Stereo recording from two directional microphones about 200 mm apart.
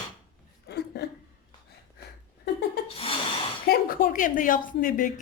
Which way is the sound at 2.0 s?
55° left (ahead or behind).